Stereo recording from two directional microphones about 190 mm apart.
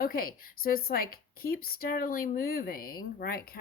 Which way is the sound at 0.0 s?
50° left (ahead or behind).